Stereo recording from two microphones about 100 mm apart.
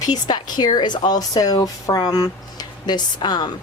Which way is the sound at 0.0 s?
45° left (ahead or behind).